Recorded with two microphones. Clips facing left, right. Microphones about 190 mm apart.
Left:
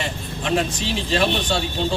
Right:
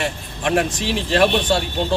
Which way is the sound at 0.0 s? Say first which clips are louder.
Right 3 dB; 65° right (ahead or behind).